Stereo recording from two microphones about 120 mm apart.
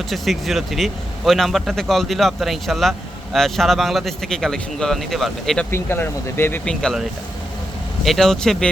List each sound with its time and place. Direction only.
0.1 s speech: centre (ahead or behind)
5.7 s speech: 20° left (ahead or behind)
6.7 s speech: 5° left (ahead or behind)
8.0 s speech: centre (ahead or behind)